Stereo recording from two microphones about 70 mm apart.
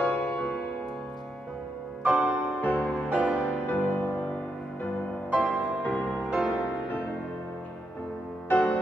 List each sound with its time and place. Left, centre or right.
0.0 s music: left
2.0 s music: centre
2.6 s music: left
3.1 s music: centre
3.6 s music: left
5.3 s music: centre
8.5 s music: left